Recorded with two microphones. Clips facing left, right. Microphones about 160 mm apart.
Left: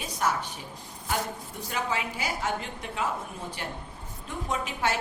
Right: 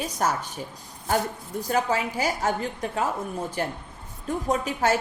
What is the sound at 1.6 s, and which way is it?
A woman's voice, 40° right (ahead or behind).